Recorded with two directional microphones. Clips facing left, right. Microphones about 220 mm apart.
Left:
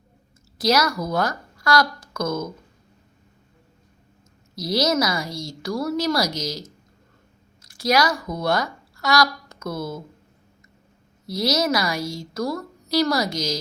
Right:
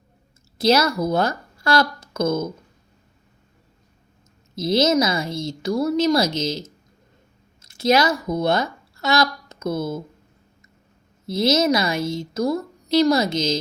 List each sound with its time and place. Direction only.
0.6 s speech: 25° right (ahead or behind)
4.5 s a woman's voice: 25° right (ahead or behind)
11.3 s a woman's voice: 25° right (ahead or behind)